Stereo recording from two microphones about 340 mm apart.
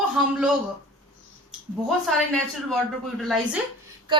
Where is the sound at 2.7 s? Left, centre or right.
Centre.